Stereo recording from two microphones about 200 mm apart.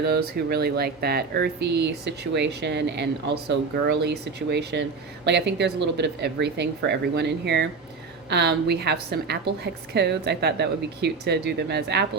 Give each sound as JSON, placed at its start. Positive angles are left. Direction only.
{"t": 0.0, "sound": "speech", "side_deg": -55}